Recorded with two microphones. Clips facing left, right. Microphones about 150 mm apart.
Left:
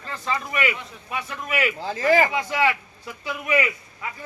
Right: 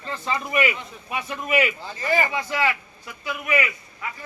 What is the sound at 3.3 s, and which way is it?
Speech, 25° left (ahead or behind).